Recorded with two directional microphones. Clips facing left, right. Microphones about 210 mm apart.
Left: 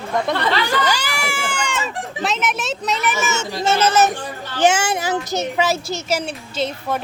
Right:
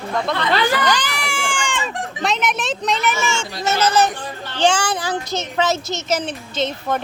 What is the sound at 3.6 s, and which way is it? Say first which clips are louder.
A woman's voice: left 1 dB; 25° left (ahead or behind).